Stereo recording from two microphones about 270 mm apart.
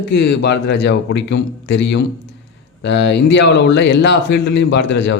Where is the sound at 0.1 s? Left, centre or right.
Left.